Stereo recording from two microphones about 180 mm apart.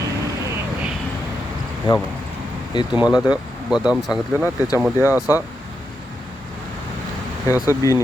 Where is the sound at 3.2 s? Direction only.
5° right (ahead or behind).